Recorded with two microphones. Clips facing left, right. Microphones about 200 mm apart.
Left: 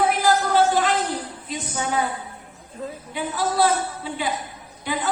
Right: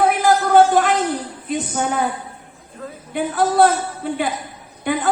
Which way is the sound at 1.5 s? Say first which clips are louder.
Right 7 dB; 55° right (ahead or behind).